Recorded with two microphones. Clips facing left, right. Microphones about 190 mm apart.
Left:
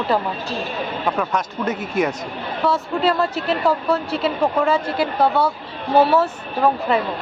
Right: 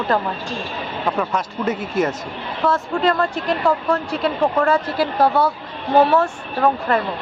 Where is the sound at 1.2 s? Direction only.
Centre (ahead or behind).